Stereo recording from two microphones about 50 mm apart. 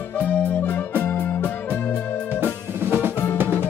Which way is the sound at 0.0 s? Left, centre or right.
Left.